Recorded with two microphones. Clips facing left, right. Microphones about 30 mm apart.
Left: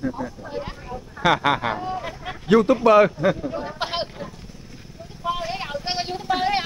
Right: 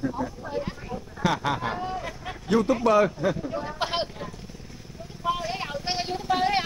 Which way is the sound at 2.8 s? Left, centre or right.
Left.